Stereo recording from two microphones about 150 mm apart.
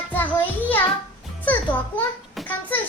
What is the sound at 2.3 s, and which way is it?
Speech, 5° left (ahead or behind).